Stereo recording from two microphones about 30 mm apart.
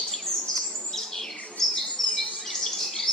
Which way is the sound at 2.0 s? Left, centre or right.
Centre.